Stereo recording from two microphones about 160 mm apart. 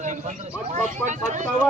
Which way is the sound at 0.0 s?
50° right (ahead or behind).